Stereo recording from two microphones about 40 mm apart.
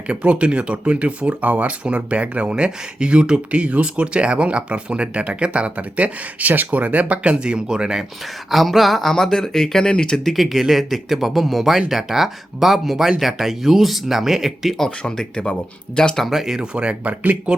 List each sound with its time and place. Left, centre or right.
0.1 s speech: right
8.4 s speech: centre
10.2 s speech: centre
14.8 s speech: centre
16.3 s speech: centre
16.6 s speech: right